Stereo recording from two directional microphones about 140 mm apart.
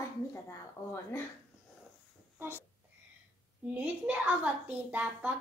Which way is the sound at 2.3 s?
15° right (ahead or behind).